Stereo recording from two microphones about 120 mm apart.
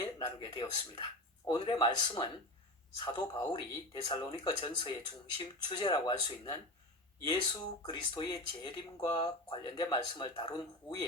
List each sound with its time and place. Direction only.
0.0 s speech: 35° left (ahead or behind)